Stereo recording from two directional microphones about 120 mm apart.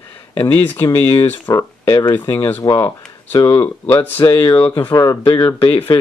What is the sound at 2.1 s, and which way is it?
Speech, 15° left (ahead or behind).